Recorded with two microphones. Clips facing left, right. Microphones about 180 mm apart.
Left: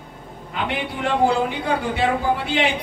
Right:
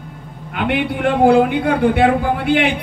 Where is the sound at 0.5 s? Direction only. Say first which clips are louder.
Right 7 dB; 60° right (ahead or behind).